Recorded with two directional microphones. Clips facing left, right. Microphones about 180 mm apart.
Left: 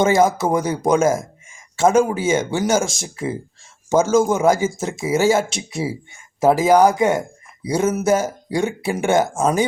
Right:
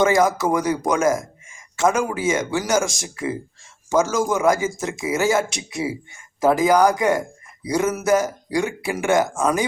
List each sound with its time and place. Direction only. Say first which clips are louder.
0.0 s speech: left 2 dB; 25° left (ahead or behind)